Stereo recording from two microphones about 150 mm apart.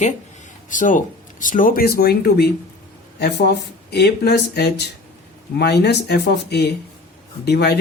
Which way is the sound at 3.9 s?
90° left.